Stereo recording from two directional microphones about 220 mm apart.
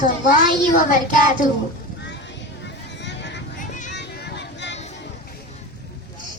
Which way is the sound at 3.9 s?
50° left (ahead or behind).